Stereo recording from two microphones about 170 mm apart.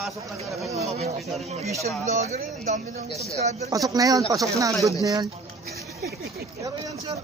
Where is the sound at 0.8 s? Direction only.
40° right (ahead or behind).